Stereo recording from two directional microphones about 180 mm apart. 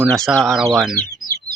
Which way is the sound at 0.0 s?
Centre (ahead or behind).